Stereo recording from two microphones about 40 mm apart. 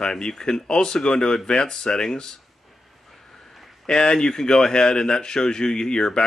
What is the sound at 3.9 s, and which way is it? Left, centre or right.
Speech, centre.